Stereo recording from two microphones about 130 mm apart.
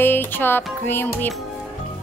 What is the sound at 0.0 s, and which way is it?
Music, 15° left (ahead or behind).